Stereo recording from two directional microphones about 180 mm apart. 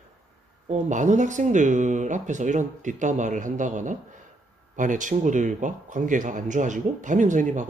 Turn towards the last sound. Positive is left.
turn(degrees=-45)  # may be behind; listen again after turning